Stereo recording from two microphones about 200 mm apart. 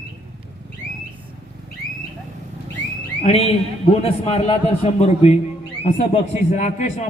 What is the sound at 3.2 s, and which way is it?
A man's voice, 30° left (ahead or behind).